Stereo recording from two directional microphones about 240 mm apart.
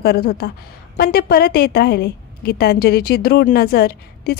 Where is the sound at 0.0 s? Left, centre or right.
Left.